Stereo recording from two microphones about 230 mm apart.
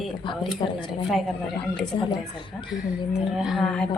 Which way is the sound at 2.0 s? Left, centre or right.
Left.